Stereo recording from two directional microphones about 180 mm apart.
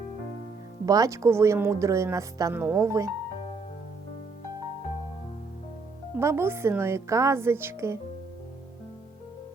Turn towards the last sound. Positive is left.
turn(degrees=-15)  # may be behind; listen again after turning